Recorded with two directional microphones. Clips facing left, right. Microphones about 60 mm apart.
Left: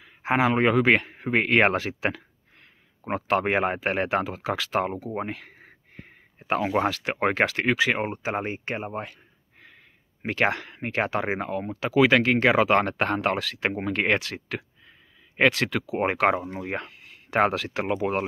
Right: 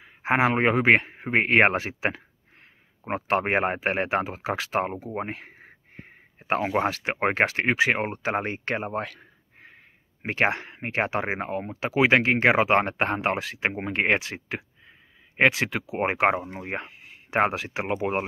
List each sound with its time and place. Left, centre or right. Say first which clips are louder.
0.0 s a man's voice: right 1 dB; right
5.2 s a sound: left 1 dB; right
6.9 s speech: even; right
8.0 s speech: right 1 dB; right
10.2 s speech: even; right